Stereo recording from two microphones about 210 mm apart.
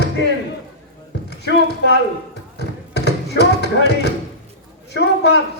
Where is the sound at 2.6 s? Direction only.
55° left (ahead or behind).